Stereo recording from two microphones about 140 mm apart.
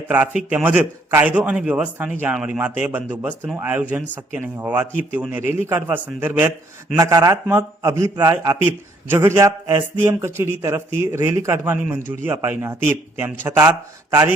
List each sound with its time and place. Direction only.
0.1 s a man's voice: 10° right (ahead or behind)
6.9 s a man's voice: 25° right (ahead or behind)